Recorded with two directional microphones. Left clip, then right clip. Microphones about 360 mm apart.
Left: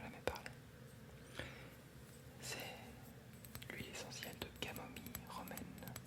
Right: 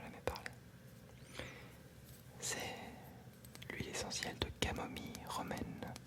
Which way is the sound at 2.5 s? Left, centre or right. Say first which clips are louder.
Right 5 dB; right.